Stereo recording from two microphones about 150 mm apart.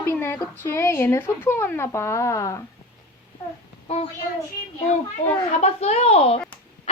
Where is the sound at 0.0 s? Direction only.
15° left (ahead or behind).